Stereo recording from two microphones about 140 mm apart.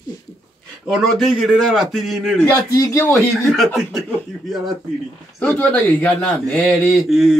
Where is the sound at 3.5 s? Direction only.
Centre (ahead or behind).